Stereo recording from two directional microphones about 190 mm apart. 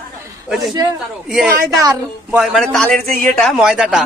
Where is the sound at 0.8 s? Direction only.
20° right (ahead or behind).